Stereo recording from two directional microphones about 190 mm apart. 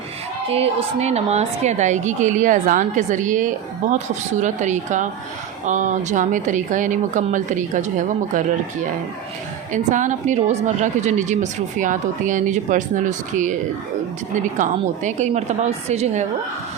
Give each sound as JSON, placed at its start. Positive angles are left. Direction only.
{"t": 0.5, "sound": "speech", "side_deg": -30}
{"t": 9.7, "sound": "speech", "side_deg": -40}